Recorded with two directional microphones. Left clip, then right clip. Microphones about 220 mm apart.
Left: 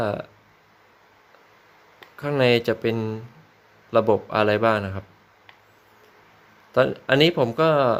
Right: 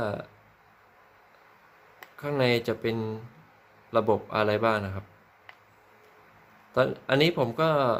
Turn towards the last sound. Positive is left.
turn(degrees=20)  # may be behind; listen again after turning